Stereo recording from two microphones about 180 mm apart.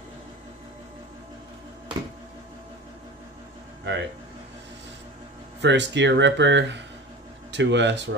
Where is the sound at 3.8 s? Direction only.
80° right.